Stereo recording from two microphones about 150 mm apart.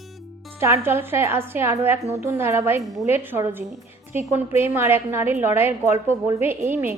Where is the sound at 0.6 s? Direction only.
20° right (ahead or behind).